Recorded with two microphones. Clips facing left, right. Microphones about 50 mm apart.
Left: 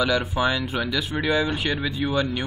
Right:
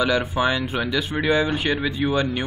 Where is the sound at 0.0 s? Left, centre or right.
Centre.